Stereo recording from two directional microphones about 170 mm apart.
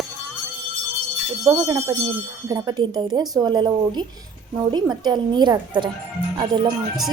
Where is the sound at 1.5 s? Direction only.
20° right (ahead or behind).